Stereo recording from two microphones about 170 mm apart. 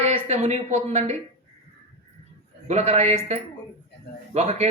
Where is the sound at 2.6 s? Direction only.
40° right (ahead or behind).